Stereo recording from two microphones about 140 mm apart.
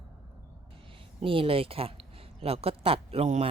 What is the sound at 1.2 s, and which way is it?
A woman's voice, 40° right (ahead or behind).